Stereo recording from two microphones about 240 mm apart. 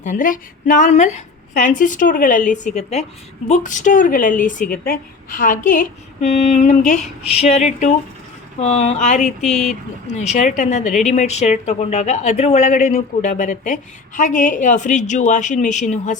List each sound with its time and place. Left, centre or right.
0.0 s a woman's voice: left